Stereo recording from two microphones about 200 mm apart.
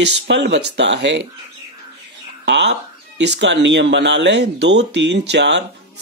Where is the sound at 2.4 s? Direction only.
60° right (ahead or behind).